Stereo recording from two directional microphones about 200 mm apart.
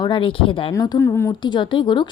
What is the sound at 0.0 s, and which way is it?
Speech, 25° left (ahead or behind).